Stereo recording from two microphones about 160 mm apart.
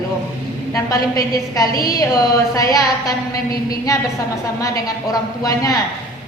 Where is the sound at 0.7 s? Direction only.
20° left (ahead or behind).